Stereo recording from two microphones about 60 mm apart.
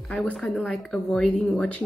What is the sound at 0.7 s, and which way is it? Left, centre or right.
Speech, centre.